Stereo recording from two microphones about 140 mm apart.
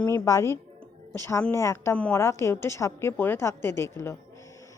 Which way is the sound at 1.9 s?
10° left (ahead or behind).